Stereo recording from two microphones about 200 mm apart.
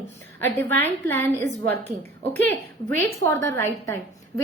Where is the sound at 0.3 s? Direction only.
10° left (ahead or behind).